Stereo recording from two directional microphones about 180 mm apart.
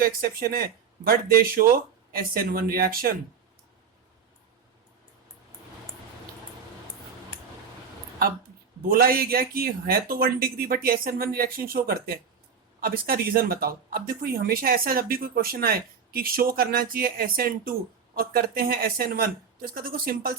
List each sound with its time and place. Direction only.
0.0 s speech: 55° right (ahead or behind)
8.2 s speech: 55° right (ahead or behind)